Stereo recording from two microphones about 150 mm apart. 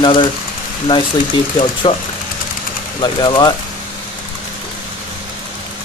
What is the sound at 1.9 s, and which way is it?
Speech, 35° left (ahead or behind).